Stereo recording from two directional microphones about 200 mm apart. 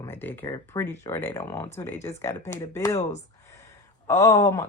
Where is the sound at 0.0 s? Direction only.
10° left (ahead or behind).